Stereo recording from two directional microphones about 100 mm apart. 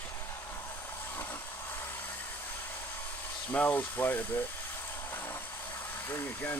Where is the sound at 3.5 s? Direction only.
15° left (ahead or behind).